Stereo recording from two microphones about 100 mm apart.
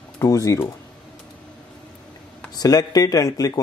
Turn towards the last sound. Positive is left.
turn(degrees=35)  # may be behind; listen again after turning